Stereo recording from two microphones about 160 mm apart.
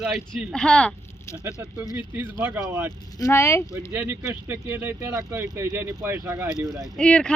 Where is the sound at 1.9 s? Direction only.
10° right (ahead or behind).